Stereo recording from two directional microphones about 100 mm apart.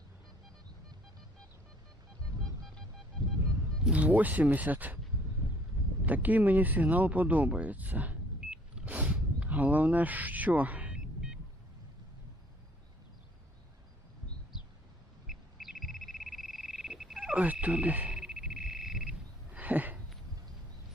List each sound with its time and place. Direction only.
3.2 s music: 5° left (ahead or behind)
3.8 s speech: 15° right (ahead or behind)
6.1 s speech: 15° right (ahead or behind)
15.3 s frog: 5° right (ahead or behind)